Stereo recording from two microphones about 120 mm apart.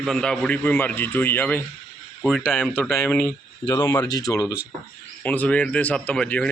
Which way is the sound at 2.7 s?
20° left (ahead or behind).